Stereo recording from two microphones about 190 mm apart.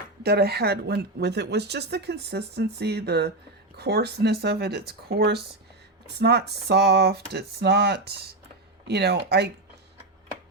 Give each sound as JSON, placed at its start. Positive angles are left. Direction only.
{"t": 0.2, "sound": "a woman's voice", "side_deg": -55}